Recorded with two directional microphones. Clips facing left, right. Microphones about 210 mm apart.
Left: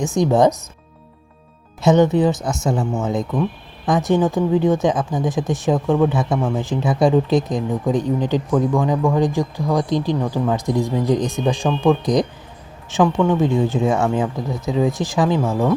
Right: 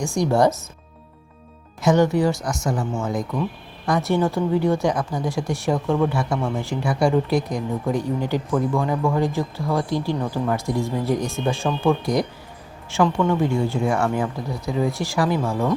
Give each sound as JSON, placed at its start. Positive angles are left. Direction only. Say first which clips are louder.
{"t": 0.0, "sound": "speech", "louder": "left 3 dB", "side_deg": 20}
{"t": 1.8, "sound": "speech", "louder": "left 3 dB", "side_deg": 20}